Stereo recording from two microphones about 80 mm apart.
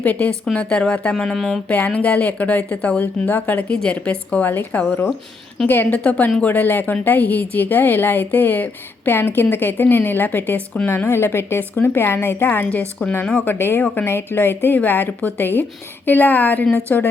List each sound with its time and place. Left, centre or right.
0.0 s a woman's voice: left; by 1.6 s centre
1.6 s a woman's voice: centre